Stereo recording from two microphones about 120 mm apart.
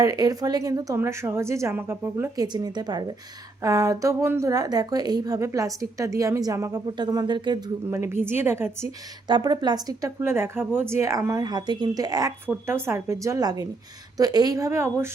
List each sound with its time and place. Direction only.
0.0 s a woman's voice: 30° right (ahead or behind)
0.9 s speech: 20° right (ahead or behind)
2.3 s a woman's voice: 35° right (ahead or behind)
7.9 s speech: 20° right (ahead or behind)
9.2 s a woman's voice: 40° right (ahead or behind)
10.2 s speech: 20° right (ahead or behind)
11.4 s a woman's voice: 35° right (ahead or behind)
12.5 s speech: 20° right (ahead or behind)